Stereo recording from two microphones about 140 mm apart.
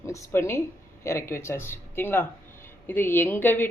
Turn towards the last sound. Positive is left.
turn(degrees=15)  # may be behind; listen again after turning